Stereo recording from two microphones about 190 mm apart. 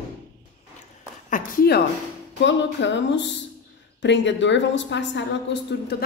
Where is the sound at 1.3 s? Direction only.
55° left (ahead or behind).